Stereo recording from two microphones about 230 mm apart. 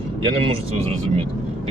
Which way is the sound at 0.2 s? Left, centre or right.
Right.